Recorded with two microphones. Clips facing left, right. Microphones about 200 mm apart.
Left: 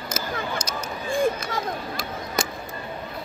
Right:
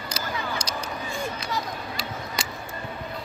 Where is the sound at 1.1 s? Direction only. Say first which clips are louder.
Left 9 dB; 50° left (ahead or behind).